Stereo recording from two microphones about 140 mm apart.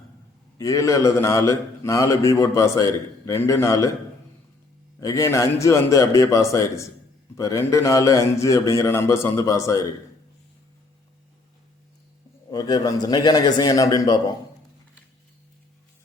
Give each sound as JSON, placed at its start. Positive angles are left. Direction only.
{"t": 0.6, "sound": "a man's voice", "side_deg": 25}
{"t": 4.9, "sound": "a man's voice", "side_deg": 25}
{"t": 12.5, "sound": "a man's voice", "side_deg": 30}